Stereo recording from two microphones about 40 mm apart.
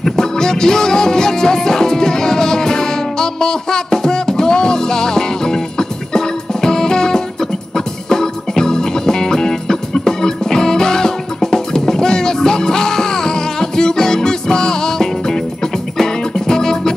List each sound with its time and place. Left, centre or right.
0.0 s music: centre